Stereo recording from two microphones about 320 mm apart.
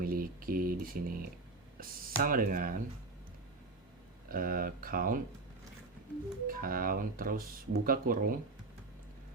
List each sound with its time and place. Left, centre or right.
0.0 s speech: right
4.3 s speech: right
6.5 s speech: right